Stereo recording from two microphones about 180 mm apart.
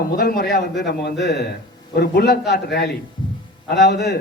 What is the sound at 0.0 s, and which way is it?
A man's voice, 60° left (ahead or behind).